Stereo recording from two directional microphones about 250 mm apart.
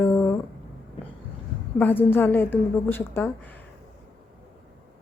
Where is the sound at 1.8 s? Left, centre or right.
Centre.